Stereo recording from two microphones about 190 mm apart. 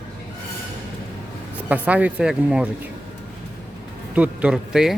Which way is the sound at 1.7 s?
10° right (ahead or behind).